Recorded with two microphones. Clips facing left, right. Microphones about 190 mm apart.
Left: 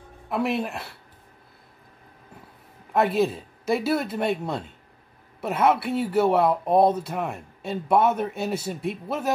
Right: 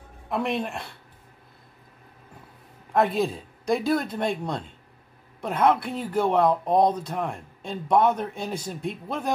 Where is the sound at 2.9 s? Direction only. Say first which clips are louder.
Left 1 dB; 5° left (ahead or behind).